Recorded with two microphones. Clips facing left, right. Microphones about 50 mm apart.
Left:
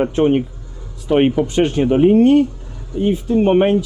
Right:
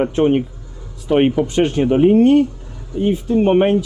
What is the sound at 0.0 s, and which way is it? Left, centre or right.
Speech, left.